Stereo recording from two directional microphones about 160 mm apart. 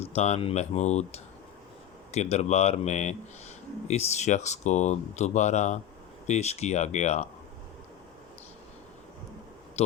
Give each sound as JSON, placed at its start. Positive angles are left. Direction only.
{"t": 0.0, "sound": "speech", "side_deg": 40}
{"t": 9.8, "sound": "speech", "side_deg": 40}